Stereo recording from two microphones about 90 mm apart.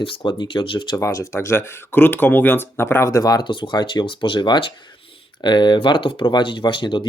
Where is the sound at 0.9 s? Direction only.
35° left (ahead or behind).